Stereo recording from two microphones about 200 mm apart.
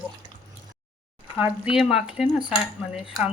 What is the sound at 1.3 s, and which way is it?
Cutlery, 5° right (ahead or behind).